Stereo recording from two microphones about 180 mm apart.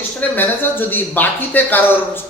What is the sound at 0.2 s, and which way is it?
Speech, 10° left (ahead or behind).